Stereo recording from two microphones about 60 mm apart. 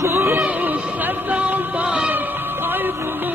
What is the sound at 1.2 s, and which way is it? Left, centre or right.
Music, right.